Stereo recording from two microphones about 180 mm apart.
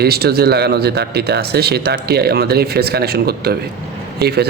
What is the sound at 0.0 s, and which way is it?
Speech, 60° right (ahead or behind).